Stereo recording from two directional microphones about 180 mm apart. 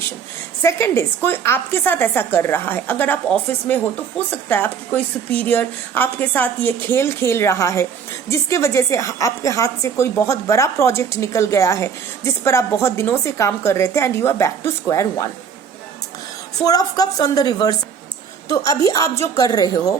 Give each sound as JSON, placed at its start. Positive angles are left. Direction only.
{"t": 0.6, "sound": "a woman's voice", "side_deg": 15}
{"t": 16.6, "sound": "a woman's voice", "side_deg": 20}